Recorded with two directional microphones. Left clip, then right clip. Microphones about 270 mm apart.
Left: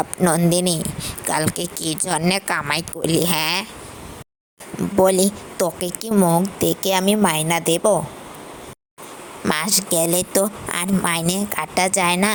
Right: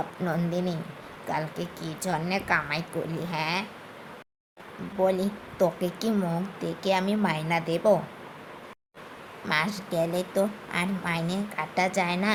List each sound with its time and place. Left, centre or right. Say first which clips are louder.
0.2 s speech: left 13 dB; left
5.0 s speech: left 5 dB; left
9.4 s speech: left 6 dB; left